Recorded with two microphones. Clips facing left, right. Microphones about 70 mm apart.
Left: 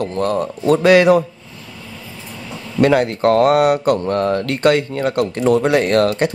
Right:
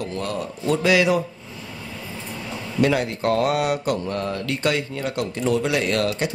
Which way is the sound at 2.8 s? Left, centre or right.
Left.